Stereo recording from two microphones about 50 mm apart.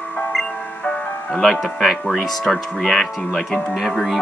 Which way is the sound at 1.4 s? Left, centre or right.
Centre.